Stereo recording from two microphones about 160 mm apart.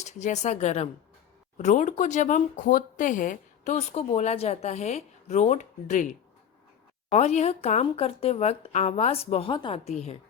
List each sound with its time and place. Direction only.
0.0 s speech: 50° left (ahead or behind)
7.1 s a woman's voice: 45° left (ahead or behind)